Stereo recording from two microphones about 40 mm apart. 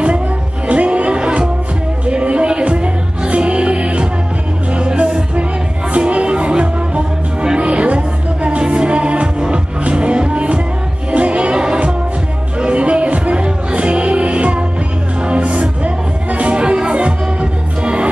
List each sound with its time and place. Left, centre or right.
0.7 s music: right